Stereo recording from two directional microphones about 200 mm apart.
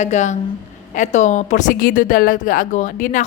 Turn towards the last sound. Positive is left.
turn(degrees=40)  # may be behind; listen again after turning